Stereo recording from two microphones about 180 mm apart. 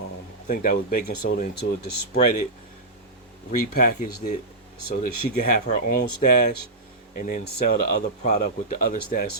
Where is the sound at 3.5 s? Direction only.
45° left (ahead or behind).